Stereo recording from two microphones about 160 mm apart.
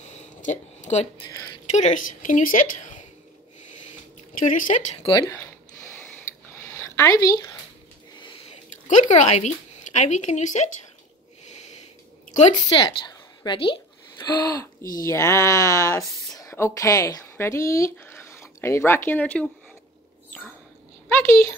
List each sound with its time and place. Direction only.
0.4 s a woman's voice: 45° left (ahead or behind)
4.5 s speech: 55° left (ahead or behind)
5.3 s a sound: 10° left (ahead or behind)
8.2 s a sound: 30° left (ahead or behind)
8.8 s a woman's voice: 50° left (ahead or behind)
12.6 s a woman's voice: 30° left (ahead or behind); by 19.5 s 10° left (ahead or behind)
21.1 s a woman's voice: 15° left (ahead or behind)